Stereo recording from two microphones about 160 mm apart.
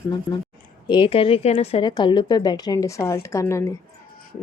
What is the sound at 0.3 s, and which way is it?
Speech, 15° left (ahead or behind).